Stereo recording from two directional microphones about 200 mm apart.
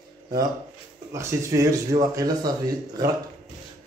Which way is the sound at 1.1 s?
15° right (ahead or behind).